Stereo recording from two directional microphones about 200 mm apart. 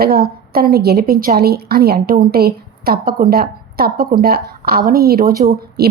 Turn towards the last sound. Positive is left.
turn(degrees=-50)  # may be behind; listen again after turning